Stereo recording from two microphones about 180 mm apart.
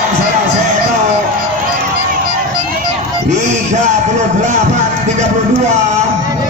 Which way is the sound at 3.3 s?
40° right (ahead or behind).